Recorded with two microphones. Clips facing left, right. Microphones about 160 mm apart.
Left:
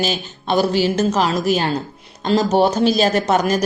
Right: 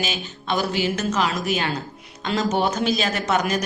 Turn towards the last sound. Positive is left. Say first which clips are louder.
# left 5 dB
turn(degrees=35)  # may be behind; listen again after turning